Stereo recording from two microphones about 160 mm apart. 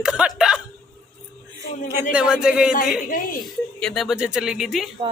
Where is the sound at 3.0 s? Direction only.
60° left (ahead or behind).